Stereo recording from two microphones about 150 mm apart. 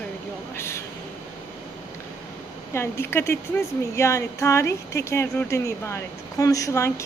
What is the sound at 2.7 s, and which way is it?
A woman's voice, 15° left (ahead or behind).